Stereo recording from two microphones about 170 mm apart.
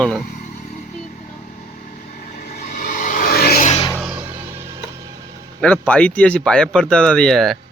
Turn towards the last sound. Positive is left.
turn(degrees=0)  # may be behind; listen again after turning